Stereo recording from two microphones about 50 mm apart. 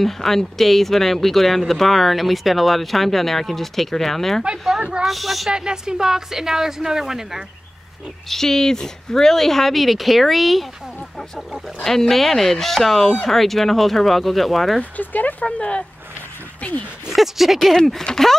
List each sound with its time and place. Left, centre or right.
0.0 s speech: centre
5.5 s speech: centre
8.3 s speech: centre
14.8 s speech: left
15.4 s speech: left
17.1 s speech: centre
18.0 s speech: centre